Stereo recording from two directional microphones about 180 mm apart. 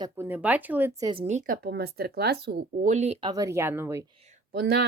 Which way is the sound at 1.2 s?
40° right (ahead or behind).